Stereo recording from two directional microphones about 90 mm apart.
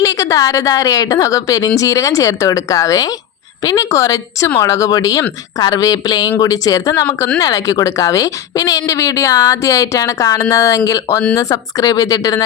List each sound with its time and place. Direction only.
0.0 s a woman's voice: 35° left (ahead or behind)